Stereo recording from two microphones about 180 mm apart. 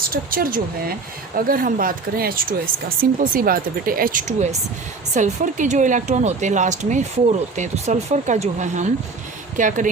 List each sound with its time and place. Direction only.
0.1 s speech: 55° right (ahead or behind)